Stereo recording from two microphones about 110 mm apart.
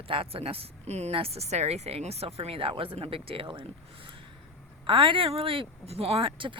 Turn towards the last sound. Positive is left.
turn(degrees=-50)  # may be behind; listen again after turning